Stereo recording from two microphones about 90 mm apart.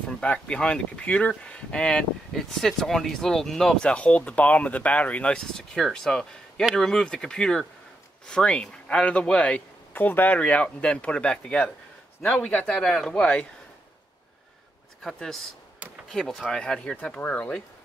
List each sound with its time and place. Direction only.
0.2 s speech: 10° left (ahead or behind)
15.0 s speech: 5° left (ahead or behind)